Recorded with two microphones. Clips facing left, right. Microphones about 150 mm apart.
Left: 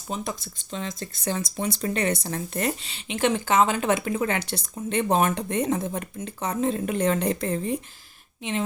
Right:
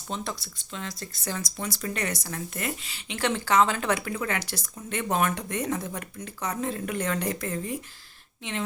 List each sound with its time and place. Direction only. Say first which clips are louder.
0.1 s a woman's voice: left 2 dB; 10° left (ahead or behind)
0.7 s a woman's voice: left 4 dB; 25° left (ahead or behind)
8.4 s a woman's voice: left 5 dB; 20° left (ahead or behind)